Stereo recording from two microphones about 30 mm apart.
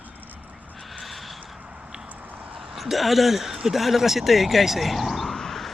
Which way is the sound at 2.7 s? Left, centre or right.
Centre.